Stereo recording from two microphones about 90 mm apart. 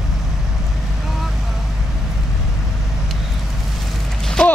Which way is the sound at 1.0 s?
5° right (ahead or behind).